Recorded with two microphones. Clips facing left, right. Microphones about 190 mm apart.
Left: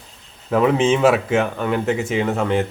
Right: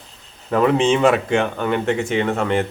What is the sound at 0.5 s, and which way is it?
Speech, centre (ahead or behind).